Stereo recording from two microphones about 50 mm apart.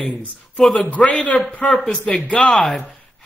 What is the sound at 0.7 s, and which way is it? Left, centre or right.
Speech, left.